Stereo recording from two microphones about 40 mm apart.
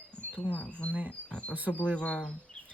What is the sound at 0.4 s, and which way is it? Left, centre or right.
Speech, left.